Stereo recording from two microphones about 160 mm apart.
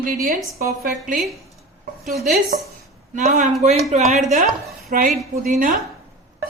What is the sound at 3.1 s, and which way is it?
A woman's voice, 50° right (ahead or behind).